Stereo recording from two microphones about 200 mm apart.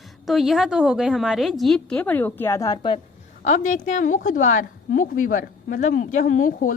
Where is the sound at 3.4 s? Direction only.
35° left (ahead or behind).